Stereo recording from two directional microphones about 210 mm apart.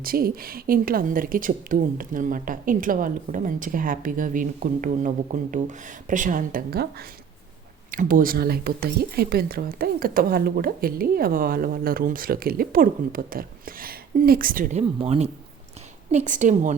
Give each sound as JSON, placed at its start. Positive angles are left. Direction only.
{"t": 0.0, "sound": "speech", "side_deg": -45}